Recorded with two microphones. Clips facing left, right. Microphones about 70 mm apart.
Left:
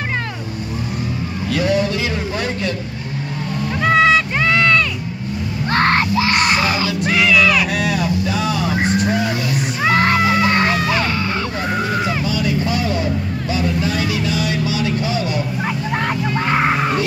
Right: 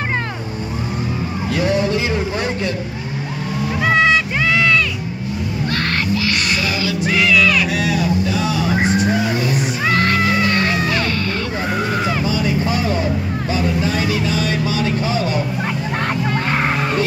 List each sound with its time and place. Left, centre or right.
1.5 s vehicle: right
3.8 s a sound: centre
5.7 s music: left
6.9 s music: centre
8.8 s vehicle: centre
9.9 s music: centre
12.3 s vehicle: right
16.4 s music: centre